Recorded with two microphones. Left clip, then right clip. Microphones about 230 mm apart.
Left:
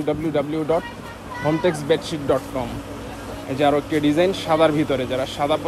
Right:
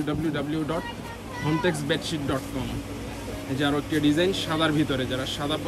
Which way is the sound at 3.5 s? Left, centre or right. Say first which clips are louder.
Left 8 dB; left.